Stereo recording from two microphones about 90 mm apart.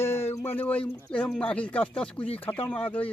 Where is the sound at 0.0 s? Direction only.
30° left (ahead or behind).